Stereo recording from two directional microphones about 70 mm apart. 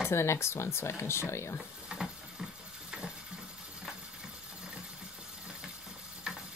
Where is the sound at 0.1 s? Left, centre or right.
Left.